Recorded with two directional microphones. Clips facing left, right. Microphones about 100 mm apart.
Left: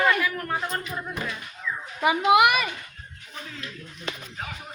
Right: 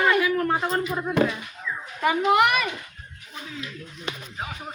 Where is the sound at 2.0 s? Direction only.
10° left (ahead or behind).